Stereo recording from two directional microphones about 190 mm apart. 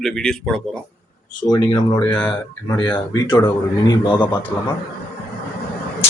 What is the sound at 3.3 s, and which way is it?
Speech, 20° left (ahead or behind).